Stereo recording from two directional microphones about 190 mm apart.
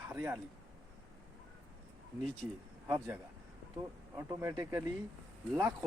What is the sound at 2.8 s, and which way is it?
Speech, 10° right (ahead or behind).